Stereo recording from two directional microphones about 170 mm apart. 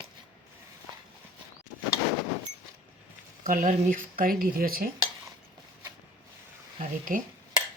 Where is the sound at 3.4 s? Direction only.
55° right (ahead or behind).